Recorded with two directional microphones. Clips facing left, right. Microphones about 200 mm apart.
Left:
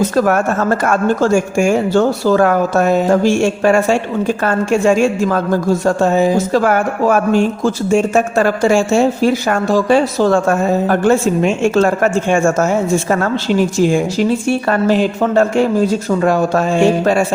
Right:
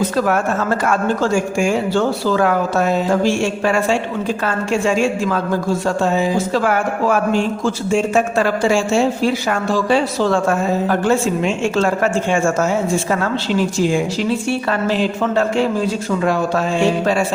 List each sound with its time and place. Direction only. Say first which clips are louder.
0.9 s speech: left 4 dB; 45° left (ahead or behind)